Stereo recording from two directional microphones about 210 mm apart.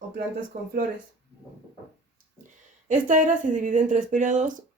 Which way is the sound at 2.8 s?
40° right (ahead or behind).